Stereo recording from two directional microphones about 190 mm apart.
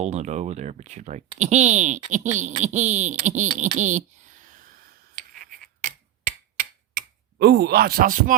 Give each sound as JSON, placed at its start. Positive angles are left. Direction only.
{"t": 0.0, "sound": "speech", "side_deg": -35}
{"t": 5.2, "sound": "a sound", "side_deg": -40}
{"t": 6.9, "sound": "speech", "side_deg": -60}